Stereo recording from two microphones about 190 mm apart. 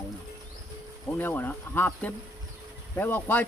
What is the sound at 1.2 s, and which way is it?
Speech, 10° left (ahead or behind).